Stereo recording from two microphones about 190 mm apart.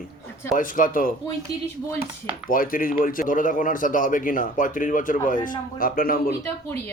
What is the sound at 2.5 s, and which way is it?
Speech, 45° left (ahead or behind).